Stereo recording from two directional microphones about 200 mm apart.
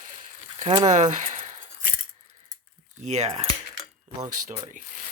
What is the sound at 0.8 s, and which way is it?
Speech, 35° right (ahead or behind).